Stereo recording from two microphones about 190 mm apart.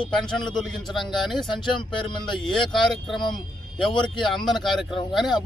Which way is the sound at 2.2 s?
Centre (ahead or behind).